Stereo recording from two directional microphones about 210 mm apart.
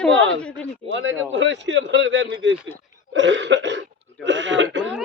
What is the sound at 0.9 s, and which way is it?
A man's voice, 60° right (ahead or behind).